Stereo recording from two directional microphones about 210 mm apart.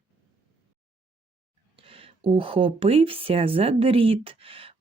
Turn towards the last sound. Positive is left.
turn(degrees=-25)  # may be behind; listen again after turning